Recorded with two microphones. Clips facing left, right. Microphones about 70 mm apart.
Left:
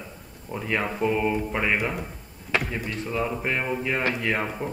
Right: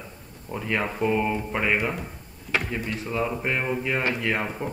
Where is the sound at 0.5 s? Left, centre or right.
Centre.